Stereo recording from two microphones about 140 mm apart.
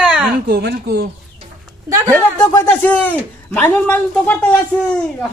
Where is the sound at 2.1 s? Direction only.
20° left (ahead or behind).